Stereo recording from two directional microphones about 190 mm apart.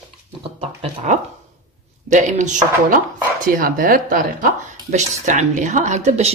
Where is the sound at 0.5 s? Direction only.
40° right (ahead or behind).